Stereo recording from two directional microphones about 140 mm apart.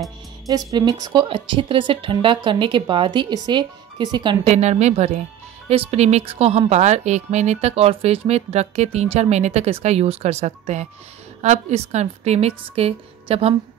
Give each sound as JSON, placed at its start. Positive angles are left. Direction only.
{"t": 0.5, "sound": "a woman's voice", "side_deg": -25}
{"t": 4.5, "sound": "a woman's voice", "side_deg": -55}